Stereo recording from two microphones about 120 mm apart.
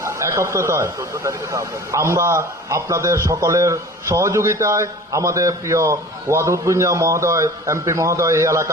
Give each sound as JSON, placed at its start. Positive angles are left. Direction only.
{"t": 0.0, "sound": "speech", "side_deg": -25}